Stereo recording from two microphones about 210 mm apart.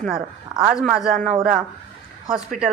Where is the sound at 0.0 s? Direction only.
5° right (ahead or behind).